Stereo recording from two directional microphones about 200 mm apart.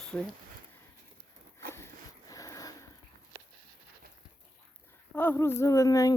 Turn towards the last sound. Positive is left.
turn(degrees=15)  # may be behind; listen again after turning